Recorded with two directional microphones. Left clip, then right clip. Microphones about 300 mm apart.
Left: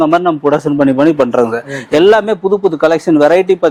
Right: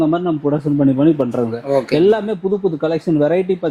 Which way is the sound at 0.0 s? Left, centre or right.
Centre.